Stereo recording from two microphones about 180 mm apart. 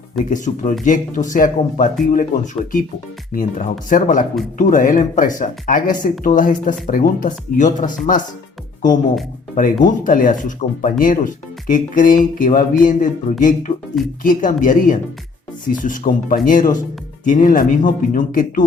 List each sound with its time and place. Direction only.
0.3 s speech: 45° left (ahead or behind)
9.6 s speech: 45° left (ahead or behind)